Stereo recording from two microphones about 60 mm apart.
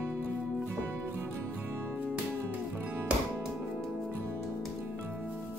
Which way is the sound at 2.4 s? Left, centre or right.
Right.